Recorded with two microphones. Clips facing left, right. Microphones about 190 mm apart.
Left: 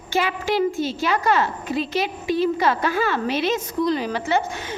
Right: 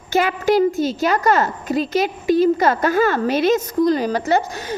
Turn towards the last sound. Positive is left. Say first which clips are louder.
# right 3 dB
turn(degrees=-40)  # may be behind; listen again after turning